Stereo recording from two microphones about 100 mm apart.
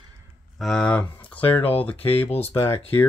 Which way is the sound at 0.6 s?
5° left (ahead or behind).